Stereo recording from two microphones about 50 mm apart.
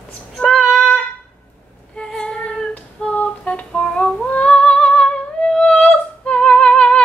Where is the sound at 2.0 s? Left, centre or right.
Centre.